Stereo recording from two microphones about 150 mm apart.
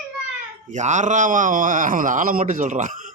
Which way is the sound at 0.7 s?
55° right (ahead or behind).